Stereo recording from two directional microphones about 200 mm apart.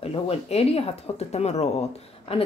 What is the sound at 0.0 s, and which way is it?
Speech, 30° left (ahead or behind).